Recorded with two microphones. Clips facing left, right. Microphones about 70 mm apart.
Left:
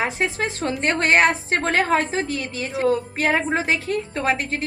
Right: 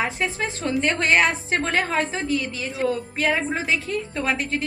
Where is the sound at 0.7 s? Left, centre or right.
Left.